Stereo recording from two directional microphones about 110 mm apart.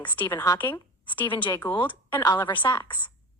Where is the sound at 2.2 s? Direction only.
30° left (ahead or behind).